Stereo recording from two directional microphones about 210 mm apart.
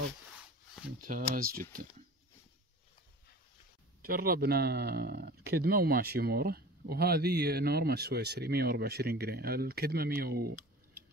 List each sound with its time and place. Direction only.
1.0 s speech: 40° right (ahead or behind)
4.0 s speech: 45° right (ahead or behind)